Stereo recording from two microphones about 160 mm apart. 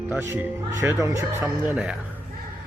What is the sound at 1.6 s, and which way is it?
Speech, 5° right (ahead or behind).